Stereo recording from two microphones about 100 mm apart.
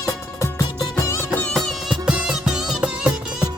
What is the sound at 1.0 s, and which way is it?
Music, 30° left (ahead or behind).